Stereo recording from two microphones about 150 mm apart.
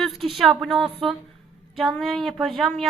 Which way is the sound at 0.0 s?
Centre (ahead or behind).